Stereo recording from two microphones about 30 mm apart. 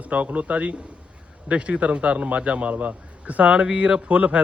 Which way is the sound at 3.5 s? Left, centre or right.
Right.